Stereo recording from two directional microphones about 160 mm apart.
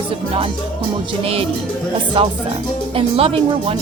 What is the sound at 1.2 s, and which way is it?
Speech, 35° right (ahead or behind).